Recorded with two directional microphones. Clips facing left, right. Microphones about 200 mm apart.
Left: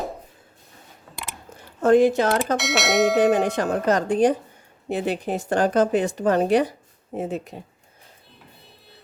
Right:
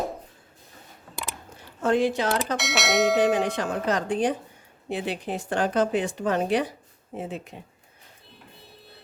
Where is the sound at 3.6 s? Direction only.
45° left (ahead or behind).